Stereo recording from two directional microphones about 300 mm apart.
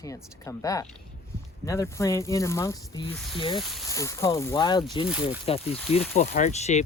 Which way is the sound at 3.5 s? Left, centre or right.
Centre.